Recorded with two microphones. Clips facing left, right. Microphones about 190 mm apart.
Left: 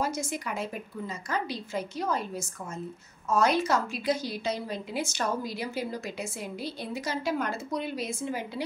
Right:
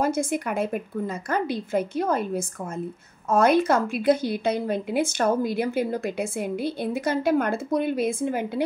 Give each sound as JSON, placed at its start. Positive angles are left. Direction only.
{"t": 0.0, "sound": "a woman's voice", "side_deg": -55}